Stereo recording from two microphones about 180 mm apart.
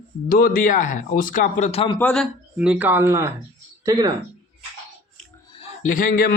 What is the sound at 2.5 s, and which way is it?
Speech, 5° right (ahead or behind).